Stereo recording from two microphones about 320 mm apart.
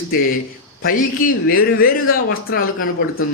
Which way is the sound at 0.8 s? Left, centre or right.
Left.